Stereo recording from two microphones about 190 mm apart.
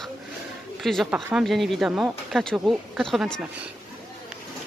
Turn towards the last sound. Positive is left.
turn(degrees=0)  # may be behind; listen again after turning